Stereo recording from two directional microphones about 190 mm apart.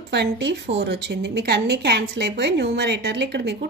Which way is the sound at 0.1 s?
65° right (ahead or behind).